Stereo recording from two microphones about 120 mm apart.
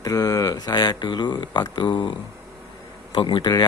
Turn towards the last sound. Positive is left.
turn(degrees=40)  # may be behind; listen again after turning